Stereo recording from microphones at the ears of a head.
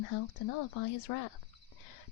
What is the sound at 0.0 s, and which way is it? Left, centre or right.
A woman's voice, left.